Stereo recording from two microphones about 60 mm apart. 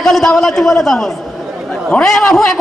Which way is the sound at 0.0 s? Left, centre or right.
Centre.